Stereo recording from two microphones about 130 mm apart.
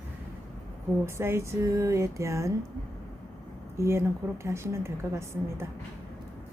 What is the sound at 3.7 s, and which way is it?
A woman's voice, 20° right (ahead or behind).